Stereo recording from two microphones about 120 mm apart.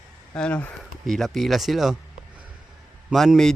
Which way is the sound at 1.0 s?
Centre (ahead or behind).